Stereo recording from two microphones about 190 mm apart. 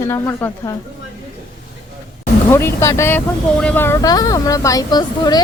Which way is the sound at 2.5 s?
15° left (ahead or behind).